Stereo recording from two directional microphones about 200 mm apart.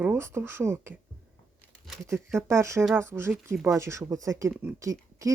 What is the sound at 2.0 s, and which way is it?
Speech, 15° right (ahead or behind).